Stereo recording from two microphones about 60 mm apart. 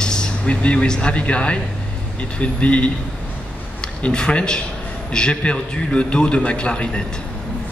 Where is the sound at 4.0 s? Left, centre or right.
Centre.